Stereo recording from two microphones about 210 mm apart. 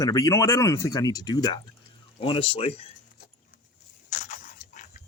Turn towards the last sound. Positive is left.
turn(degrees=35)  # may be behind; listen again after turning